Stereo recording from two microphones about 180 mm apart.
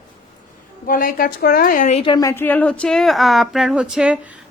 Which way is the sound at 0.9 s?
50° left (ahead or behind).